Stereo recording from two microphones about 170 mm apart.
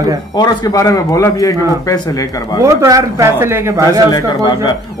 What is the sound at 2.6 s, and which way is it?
Speech, 15° right (ahead or behind).